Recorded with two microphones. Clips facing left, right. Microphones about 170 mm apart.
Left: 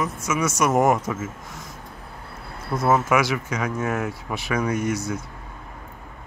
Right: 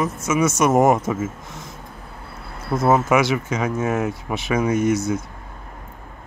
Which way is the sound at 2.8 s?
25° right (ahead or behind).